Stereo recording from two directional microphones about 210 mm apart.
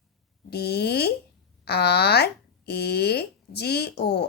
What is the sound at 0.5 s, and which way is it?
Speech, 50° left (ahead or behind).